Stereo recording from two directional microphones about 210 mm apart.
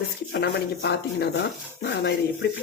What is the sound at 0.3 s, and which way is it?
Speech, 55° left (ahead or behind).